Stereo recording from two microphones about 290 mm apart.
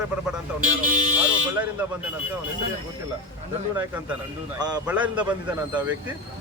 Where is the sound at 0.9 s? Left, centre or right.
Right.